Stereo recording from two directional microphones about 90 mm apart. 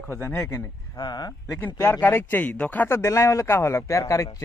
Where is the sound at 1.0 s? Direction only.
50° left (ahead or behind).